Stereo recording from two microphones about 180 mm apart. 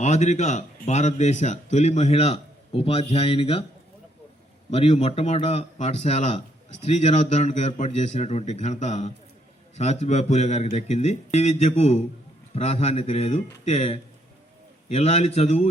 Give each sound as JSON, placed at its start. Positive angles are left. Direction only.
{"t": 0.0, "sound": "speech", "side_deg": 40}
{"t": 4.7, "sound": "speech", "side_deg": 35}